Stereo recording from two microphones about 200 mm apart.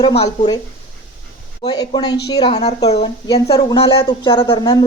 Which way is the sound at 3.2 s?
20° left (ahead or behind).